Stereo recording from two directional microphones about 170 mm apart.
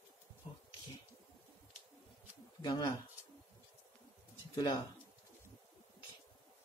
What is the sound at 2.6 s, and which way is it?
Speech, 25° left (ahead or behind).